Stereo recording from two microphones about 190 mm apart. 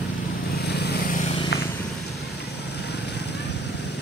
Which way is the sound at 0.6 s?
60° left (ahead or behind).